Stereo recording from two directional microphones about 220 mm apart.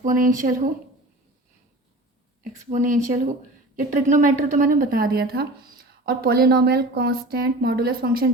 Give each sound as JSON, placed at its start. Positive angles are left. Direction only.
{"t": 0.0, "sound": "speech", "side_deg": -35}
{"t": 2.4, "sound": "speech", "side_deg": -35}